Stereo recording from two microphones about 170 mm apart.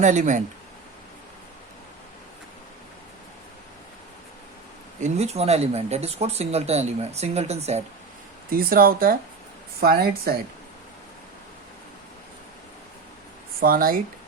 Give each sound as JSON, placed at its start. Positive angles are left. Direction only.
{"t": 0.0, "sound": "speech", "side_deg": -45}
{"t": 4.9, "sound": "speech", "side_deg": -40}
{"t": 8.4, "sound": "speech", "side_deg": -60}
{"t": 13.6, "sound": "speech", "side_deg": -60}